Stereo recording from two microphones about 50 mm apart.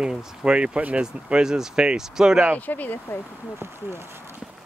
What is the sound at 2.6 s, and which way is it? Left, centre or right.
Speech, left.